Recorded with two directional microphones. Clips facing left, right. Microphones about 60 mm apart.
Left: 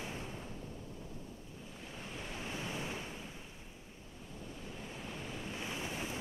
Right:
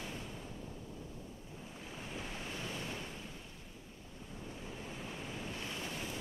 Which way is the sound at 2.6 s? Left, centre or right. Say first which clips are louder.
Left 2 dB; centre.